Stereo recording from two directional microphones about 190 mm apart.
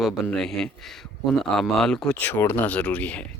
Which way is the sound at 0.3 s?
5° left (ahead or behind).